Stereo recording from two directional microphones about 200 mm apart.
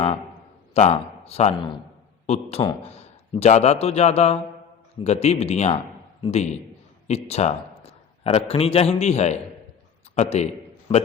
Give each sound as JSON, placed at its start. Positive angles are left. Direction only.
{"t": 0.7, "sound": "a man's voice", "side_deg": 30}